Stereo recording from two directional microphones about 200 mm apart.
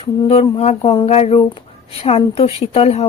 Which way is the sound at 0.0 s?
25° left (ahead or behind).